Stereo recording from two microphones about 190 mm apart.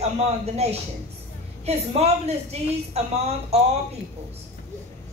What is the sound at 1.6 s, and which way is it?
A woman's voice, 35° right (ahead or behind).